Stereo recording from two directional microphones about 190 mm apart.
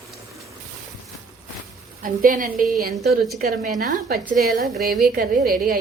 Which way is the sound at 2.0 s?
45° right (ahead or behind).